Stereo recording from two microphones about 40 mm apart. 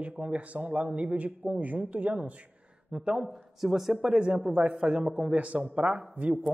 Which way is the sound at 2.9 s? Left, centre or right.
Right.